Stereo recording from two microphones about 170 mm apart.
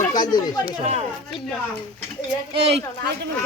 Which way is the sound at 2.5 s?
40° right (ahead or behind).